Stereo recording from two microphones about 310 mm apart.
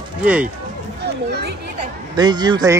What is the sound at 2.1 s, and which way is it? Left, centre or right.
Speech, centre.